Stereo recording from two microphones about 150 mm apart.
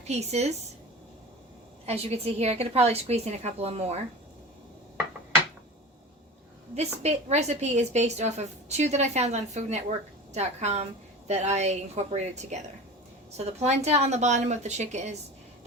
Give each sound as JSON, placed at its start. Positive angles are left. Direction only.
{"t": 0.0, "sound": "a woman's voice", "side_deg": -45}
{"t": 1.9, "sound": "a woman's voice", "side_deg": -45}
{"t": 6.7, "sound": "a woman's voice", "side_deg": -45}